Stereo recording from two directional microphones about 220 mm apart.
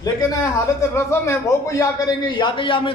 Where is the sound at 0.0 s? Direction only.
15° left (ahead or behind).